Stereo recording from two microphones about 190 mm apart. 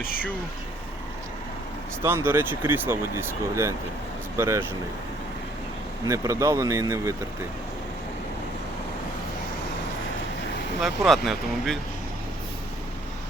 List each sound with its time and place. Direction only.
2.0 s speech: 10° right (ahead or behind)
6.1 s speech: 15° right (ahead or behind)
10.8 s speech: centre (ahead or behind)